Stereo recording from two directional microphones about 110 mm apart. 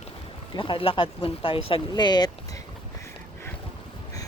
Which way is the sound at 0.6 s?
50° left (ahead or behind).